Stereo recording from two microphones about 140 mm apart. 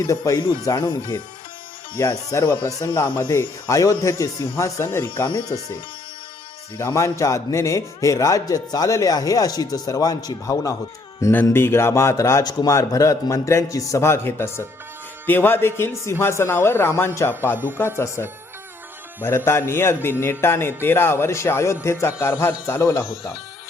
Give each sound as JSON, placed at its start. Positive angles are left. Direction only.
{"t": 0.1, "sound": "a man's voice", "side_deg": 25}
{"t": 2.0, "sound": "a man's voice", "side_deg": 20}
{"t": 5.2, "sound": "a man's voice", "side_deg": 30}
{"t": 6.7, "sound": "a man's voice", "side_deg": 20}
{"t": 19.5, "sound": "a man's voice", "side_deg": 15}